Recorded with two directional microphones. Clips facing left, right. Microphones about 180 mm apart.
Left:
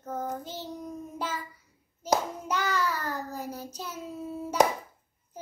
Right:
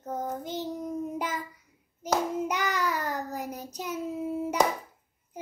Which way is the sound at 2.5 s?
15° right (ahead or behind).